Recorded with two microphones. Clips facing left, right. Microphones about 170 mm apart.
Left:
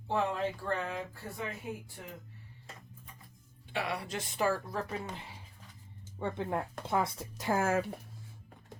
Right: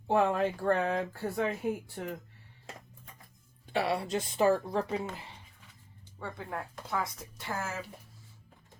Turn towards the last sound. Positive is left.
turn(degrees=55)  # may be behind; listen again after turning